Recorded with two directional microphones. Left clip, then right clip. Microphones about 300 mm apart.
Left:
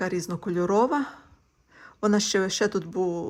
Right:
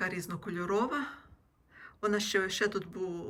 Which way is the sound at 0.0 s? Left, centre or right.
Centre.